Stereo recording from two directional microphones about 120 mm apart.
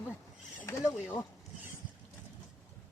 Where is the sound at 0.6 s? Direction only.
25° left (ahead or behind).